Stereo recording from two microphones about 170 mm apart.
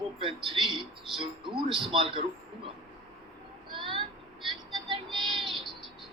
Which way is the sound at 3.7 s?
30° right (ahead or behind).